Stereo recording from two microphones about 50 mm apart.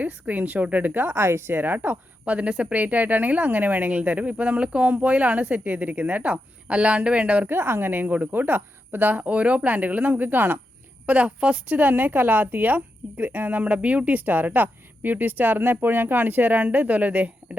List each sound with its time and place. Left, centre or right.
0.0 s a woman's voice: right
2.5 s speech: centre
2.7 s a woman's voice: right
7.4 s a woman's voice: right
11.0 s a woman's voice: right